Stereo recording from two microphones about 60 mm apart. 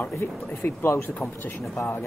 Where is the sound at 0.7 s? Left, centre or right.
Left.